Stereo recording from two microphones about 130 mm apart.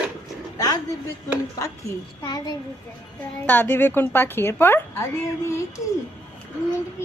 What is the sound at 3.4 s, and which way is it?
A woman's voice, 15° left (ahead or behind).